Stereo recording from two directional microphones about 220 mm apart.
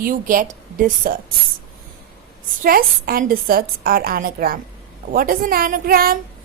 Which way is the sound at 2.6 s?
40° right (ahead or behind).